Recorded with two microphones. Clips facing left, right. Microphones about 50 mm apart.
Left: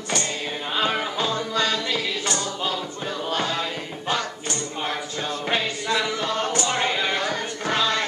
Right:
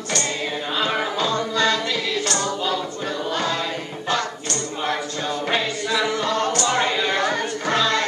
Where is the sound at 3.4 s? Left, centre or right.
Centre.